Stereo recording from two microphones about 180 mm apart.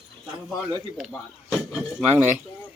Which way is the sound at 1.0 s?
5° right (ahead or behind).